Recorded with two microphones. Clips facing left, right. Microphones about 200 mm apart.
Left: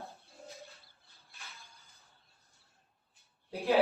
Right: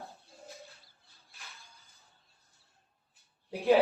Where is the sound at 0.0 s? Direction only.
Centre (ahead or behind).